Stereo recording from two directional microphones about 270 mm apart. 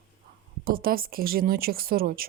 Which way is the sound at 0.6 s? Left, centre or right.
Right.